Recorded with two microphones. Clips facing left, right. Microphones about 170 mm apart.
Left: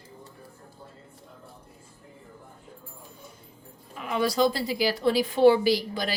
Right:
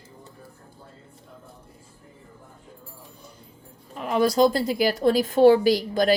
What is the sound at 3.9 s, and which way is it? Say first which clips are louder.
Speech: right 5 dB; 40° right (ahead or behind).